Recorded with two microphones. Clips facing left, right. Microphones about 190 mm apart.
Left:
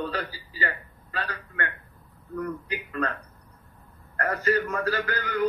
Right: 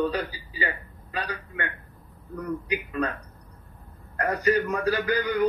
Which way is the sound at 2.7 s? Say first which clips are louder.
Right 2 dB; 15° right (ahead or behind).